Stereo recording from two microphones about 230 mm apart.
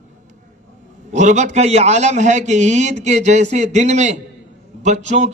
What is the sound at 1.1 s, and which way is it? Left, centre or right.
A man's voice, right.